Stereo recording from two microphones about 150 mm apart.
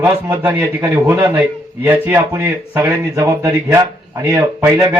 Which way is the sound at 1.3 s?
10° right (ahead or behind).